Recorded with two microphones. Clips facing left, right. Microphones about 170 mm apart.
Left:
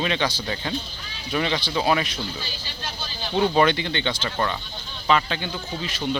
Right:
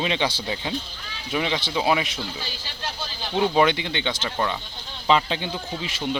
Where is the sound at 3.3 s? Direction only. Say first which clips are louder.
Even; 15° right (ahead or behind).